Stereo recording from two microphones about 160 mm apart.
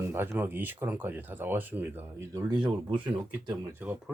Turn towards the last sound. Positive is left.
turn(degrees=-10)  # may be behind; listen again after turning